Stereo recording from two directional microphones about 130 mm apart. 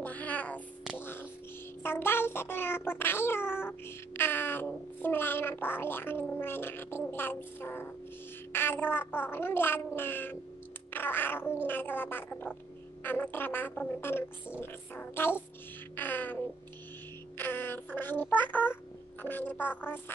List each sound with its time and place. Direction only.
0.0 s cat: 10° left (ahead or behind)
0.9 s music: 15° left (ahead or behind)
1.8 s child singing: 15° left (ahead or behind)
17.4 s child singing: 15° left (ahead or behind)